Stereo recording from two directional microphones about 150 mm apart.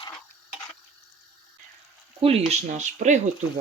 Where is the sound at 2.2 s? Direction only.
45° right (ahead or behind).